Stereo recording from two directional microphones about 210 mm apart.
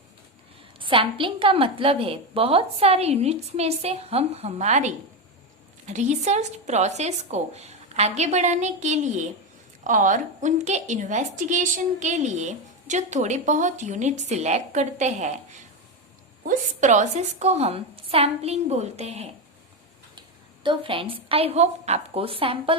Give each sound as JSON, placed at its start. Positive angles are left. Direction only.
{"t": 0.8, "sound": "a woman's voice", "side_deg": -25}
{"t": 16.5, "sound": "a woman's voice", "side_deg": -35}
{"t": 20.7, "sound": "a woman's voice", "side_deg": -25}